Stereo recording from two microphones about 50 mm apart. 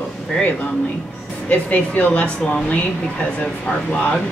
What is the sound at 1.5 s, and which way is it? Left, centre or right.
Speech, left.